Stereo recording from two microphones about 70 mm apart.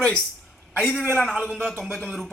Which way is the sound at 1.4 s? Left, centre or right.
Centre.